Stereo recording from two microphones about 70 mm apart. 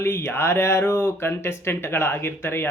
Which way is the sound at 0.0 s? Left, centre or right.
Left.